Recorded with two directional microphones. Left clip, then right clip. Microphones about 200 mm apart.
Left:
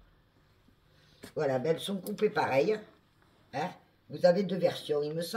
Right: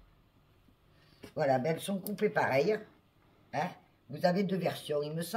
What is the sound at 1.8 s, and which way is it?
Speech, 20° right (ahead or behind).